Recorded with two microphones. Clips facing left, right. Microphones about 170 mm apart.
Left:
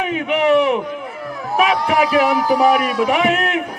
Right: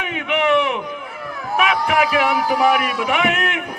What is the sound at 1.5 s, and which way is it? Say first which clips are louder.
A man's voice: left 2 dB; 35° left (ahead or behind).